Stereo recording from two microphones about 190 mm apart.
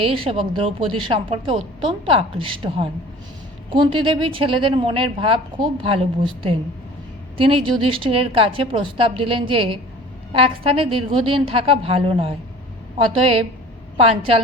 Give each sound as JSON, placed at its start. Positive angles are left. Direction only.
{"t": 0.0, "sound": "speech", "side_deg": -30}
{"t": 7.3, "sound": "speech", "side_deg": -30}